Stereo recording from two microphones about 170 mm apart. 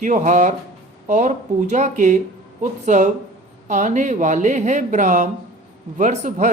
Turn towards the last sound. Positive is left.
turn(degrees=-45)  # may be behind; listen again after turning